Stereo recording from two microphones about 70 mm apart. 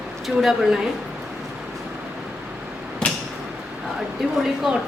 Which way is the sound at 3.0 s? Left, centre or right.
Centre.